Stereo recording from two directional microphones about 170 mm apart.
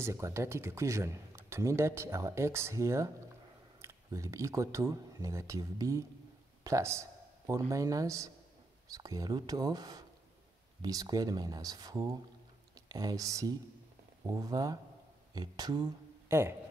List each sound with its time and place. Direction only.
0.0 s speech: 15° right (ahead or behind)